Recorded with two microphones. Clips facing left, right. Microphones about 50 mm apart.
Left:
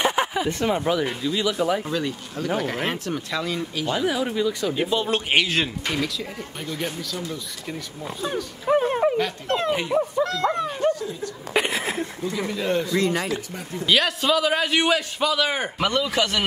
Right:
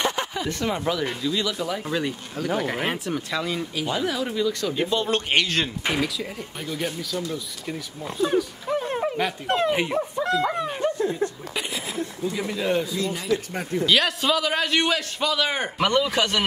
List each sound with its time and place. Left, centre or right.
0.0 s a sound: centre
0.7 s speech: centre
1.9 s a man's voice: centre
3.9 s speech: centre
5.9 s a man's voice: centre
8.8 s a sound: centre
9.1 s a man's voice: centre
11.0 s a sound: right
11.5 s a sound: left
12.4 s a man's voice: centre
13.0 s speech: left
13.3 s speech: right
13.8 s a man's voice: centre